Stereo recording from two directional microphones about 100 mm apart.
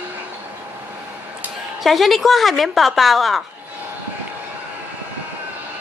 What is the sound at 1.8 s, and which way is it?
Speech, centre (ahead or behind).